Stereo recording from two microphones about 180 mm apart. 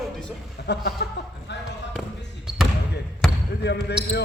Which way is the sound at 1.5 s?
75° left (ahead or behind).